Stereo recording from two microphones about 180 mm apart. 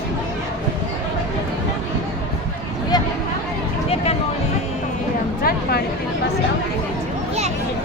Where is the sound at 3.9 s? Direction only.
35° left (ahead or behind).